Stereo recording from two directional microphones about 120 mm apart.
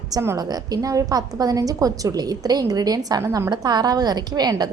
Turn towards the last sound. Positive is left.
turn(degrees=-35)  # may be behind; listen again after turning